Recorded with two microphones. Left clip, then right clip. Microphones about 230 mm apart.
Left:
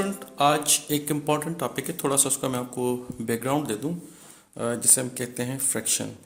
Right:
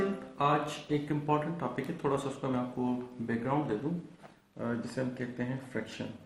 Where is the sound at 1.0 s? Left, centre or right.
Left.